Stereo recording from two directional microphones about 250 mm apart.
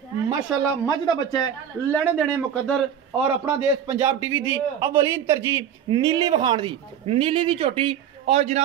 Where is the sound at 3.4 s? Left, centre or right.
Centre.